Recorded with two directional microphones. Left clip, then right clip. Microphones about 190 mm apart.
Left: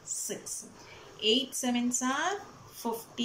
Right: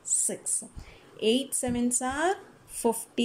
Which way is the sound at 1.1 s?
40° right (ahead or behind).